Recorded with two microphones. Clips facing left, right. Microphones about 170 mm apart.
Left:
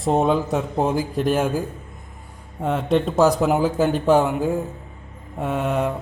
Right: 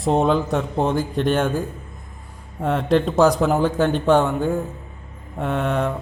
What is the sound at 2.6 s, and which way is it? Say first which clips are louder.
A man's voice: right 1 dB; centre (ahead or behind).